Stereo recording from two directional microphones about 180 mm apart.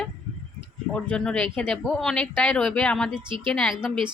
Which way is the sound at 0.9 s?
5° left (ahead or behind).